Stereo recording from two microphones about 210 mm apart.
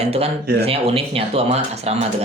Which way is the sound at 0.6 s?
30° right (ahead or behind).